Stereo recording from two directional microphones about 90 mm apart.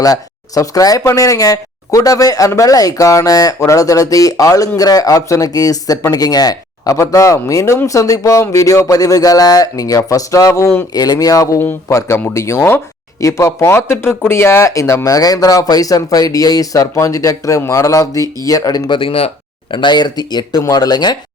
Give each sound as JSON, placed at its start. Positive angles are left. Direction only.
{"t": 0.0, "sound": "speech", "side_deg": 40}
{"t": 11.6, "sound": "speech", "side_deg": 30}
{"t": 13.1, "sound": "speech", "side_deg": 35}
{"t": 18.9, "sound": "speech", "side_deg": 90}
{"t": 19.7, "sound": "speech", "side_deg": 60}